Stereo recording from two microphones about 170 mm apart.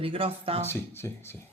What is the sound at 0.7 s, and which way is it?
Speech, 15° left (ahead or behind).